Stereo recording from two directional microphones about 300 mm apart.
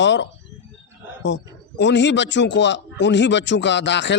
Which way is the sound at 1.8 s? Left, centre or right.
Left.